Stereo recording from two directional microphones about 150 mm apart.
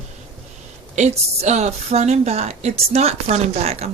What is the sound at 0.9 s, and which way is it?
A woman's voice, 50° right (ahead or behind).